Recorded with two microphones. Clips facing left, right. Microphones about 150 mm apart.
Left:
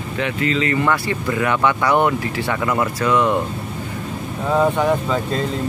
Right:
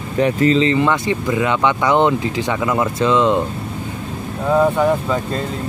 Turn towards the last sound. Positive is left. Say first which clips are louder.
# right 2 dB
turn(degrees=-5)  # may be behind; listen again after turning